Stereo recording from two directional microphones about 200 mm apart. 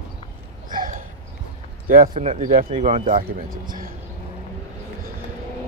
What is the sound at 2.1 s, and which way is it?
Speech, 35° right (ahead or behind).